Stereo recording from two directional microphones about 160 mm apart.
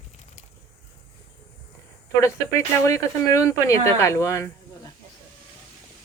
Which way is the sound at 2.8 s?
20° left (ahead or behind).